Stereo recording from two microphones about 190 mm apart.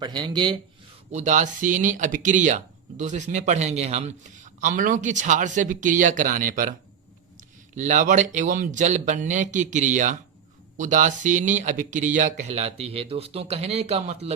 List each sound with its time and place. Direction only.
0.0 s speech: 20° right (ahead or behind)
1.1 s speech: 40° right (ahead or behind)
7.8 s speech: 40° right (ahead or behind)